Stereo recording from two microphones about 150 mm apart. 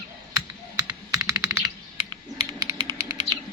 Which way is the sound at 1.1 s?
20° right (ahead or behind).